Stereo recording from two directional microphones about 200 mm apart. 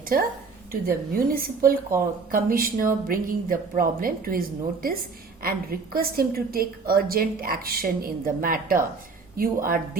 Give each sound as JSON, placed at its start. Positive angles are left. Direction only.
{"t": 0.0, "sound": "a woman's voice", "side_deg": -45}